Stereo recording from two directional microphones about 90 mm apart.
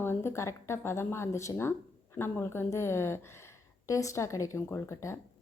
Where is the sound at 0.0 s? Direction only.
25° left (ahead or behind).